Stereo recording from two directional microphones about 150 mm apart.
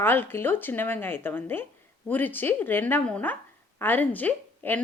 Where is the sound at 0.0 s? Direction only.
15° left (ahead or behind).